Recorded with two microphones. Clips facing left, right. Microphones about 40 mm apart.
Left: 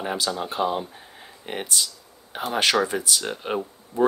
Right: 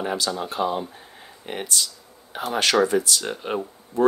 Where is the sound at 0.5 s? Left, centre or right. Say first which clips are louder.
Even; centre.